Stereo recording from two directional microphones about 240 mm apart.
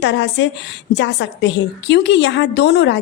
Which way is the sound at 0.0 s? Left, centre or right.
Left.